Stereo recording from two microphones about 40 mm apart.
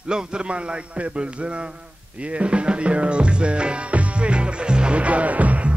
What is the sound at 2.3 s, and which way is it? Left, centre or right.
Music, right.